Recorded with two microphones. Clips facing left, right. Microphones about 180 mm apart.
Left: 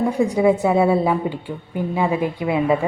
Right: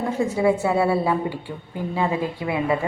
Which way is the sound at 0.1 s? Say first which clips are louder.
Even; 15° left (ahead or behind).